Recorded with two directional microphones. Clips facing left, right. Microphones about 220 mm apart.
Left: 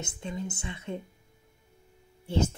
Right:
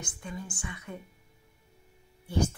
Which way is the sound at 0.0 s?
25° left (ahead or behind).